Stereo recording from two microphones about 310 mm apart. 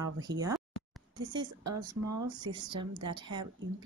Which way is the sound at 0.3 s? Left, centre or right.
Right.